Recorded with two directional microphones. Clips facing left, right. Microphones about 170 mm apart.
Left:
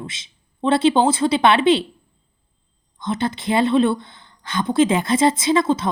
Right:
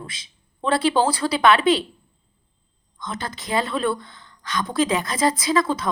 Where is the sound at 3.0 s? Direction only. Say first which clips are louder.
Left 9 dB; 25° left (ahead or behind).